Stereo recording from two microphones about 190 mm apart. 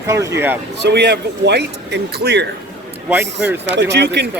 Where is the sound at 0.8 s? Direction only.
65° right (ahead or behind).